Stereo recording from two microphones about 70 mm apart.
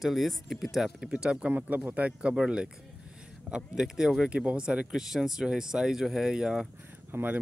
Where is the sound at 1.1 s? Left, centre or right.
Centre.